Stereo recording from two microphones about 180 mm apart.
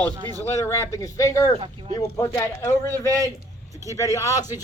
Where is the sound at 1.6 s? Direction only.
30° right (ahead or behind).